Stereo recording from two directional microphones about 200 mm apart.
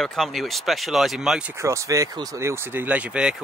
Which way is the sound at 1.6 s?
15° right (ahead or behind).